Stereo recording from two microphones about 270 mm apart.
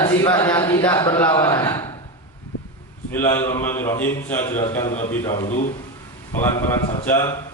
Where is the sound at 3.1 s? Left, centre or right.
Centre.